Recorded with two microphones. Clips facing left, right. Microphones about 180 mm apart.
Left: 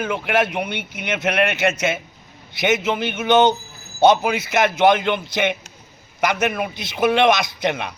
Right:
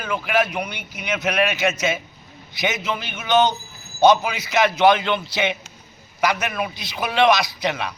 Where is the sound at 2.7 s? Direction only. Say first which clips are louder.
Left 11 dB; 20° left (ahead or behind).